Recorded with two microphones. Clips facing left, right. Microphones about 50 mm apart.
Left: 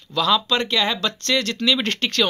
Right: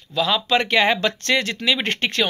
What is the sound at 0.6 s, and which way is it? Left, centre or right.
Speech, right.